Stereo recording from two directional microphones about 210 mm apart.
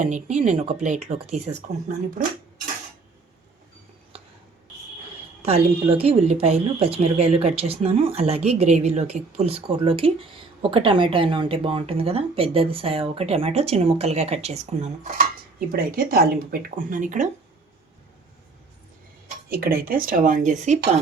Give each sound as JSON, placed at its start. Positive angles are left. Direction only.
{"t": 0.0, "sound": "speech", "side_deg": -35}
{"t": 4.1, "sound": "filing", "side_deg": -30}
{"t": 5.4, "sound": "speech", "side_deg": -30}
{"t": 15.7, "sound": "speech", "side_deg": -45}
{"t": 19.5, "sound": "speech", "side_deg": -45}